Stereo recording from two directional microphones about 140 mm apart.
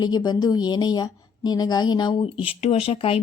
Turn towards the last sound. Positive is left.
turn(degrees=40)  # may be behind; listen again after turning